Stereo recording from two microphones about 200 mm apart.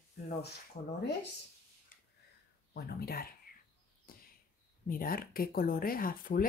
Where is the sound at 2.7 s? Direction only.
50° left (ahead or behind).